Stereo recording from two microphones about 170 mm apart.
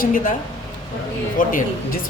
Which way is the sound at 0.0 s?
55° left (ahead or behind).